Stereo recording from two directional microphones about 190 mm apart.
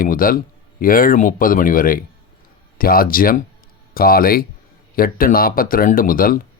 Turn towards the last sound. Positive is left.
turn(degrees=50)  # may be behind; listen again after turning